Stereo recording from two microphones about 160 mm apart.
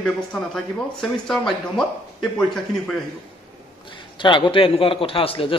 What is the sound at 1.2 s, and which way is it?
Speech, 5° left (ahead or behind).